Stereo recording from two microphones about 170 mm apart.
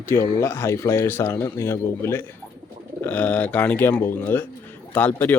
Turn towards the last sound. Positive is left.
turn(degrees=10)  # may be behind; listen again after turning